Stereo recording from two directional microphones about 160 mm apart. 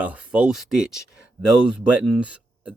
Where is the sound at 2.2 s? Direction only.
10° right (ahead or behind).